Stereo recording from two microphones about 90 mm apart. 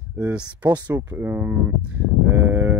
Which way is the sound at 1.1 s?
25° right (ahead or behind).